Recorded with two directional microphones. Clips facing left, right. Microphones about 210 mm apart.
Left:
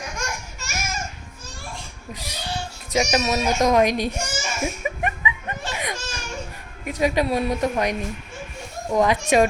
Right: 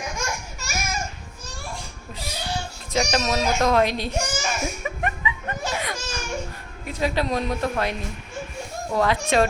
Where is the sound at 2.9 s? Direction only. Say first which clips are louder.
Left 2 dB; 10° left (ahead or behind).